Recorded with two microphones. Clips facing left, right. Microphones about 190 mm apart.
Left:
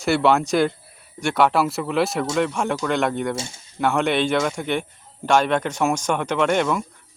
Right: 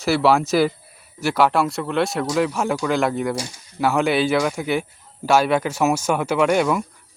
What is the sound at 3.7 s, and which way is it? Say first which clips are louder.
Speech: right 1 dB; 5° right (ahead or behind).